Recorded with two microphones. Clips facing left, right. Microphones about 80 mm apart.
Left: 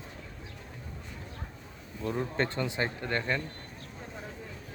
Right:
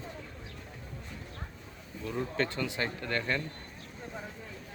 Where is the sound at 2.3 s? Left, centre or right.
Left.